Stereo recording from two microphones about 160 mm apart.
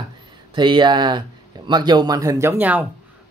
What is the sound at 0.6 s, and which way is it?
A man's voice, 30° right (ahead or behind).